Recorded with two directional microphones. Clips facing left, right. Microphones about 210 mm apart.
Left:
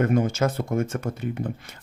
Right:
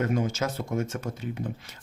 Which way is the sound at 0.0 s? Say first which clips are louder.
Left 5 dB; 55° left (ahead or behind).